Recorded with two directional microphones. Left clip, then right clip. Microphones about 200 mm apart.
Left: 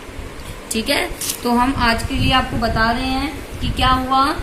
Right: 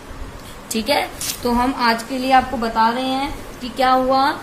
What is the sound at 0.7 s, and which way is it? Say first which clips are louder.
A woman's voice: even; 50° right (ahead or behind).